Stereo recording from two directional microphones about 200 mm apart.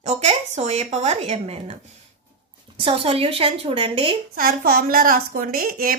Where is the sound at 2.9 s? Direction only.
30° right (ahead or behind).